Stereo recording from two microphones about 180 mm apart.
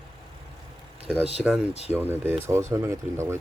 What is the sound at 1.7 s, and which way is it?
Speech, 35° left (ahead or behind).